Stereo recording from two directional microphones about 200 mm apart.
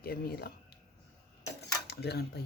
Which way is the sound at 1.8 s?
55° left (ahead or behind).